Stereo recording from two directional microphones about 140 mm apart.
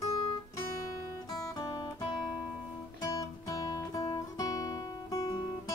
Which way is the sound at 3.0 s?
25° left (ahead or behind).